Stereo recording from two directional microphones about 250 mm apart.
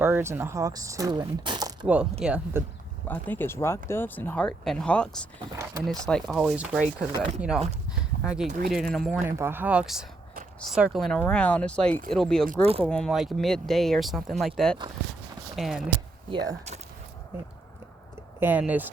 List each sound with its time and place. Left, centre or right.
0.0 s speech: centre
3.1 s speech: centre
5.5 s speech: centre
5.8 s speech: centre
8.2 s speech: centre
8.4 s speech: right
8.7 s speech: centre
9.2 s speech: centre
12.6 s speech: right
12.9 s speech: centre
16.3 s speech: centre
18.3 s speech: centre